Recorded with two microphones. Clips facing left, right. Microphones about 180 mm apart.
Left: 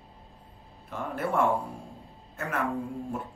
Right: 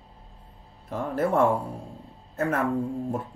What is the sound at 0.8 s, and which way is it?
Speech, 40° right (ahead or behind).